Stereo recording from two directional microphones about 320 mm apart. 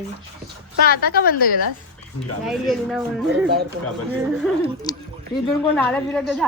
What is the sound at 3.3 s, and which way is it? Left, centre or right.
Speech, right.